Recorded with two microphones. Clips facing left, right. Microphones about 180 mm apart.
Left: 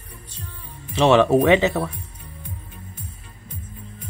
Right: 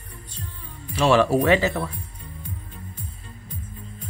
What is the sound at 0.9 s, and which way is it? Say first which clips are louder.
Speech: left 3 dB; 20° left (ahead or behind).